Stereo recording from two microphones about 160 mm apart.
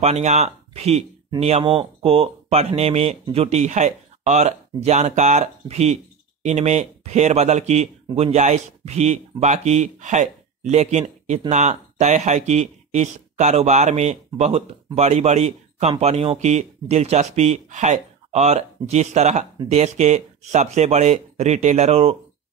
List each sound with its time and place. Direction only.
0.0 s speech: 45° right (ahead or behind)